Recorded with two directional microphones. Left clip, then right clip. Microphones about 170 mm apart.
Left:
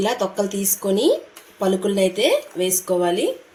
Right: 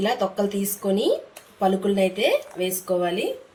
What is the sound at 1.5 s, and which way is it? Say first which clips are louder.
Speech: left 1 dB; 45° left (ahead or behind).